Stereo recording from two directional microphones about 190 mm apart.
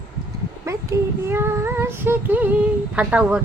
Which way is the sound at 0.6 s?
15° right (ahead or behind).